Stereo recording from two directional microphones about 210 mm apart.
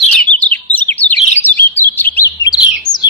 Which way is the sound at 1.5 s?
10° left (ahead or behind).